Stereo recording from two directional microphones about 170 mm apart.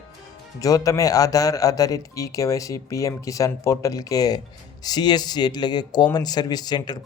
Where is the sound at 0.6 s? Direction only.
20° left (ahead or behind).